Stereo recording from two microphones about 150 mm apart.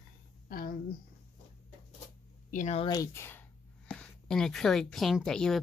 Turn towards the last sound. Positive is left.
turn(degrees=5)  # may be behind; listen again after turning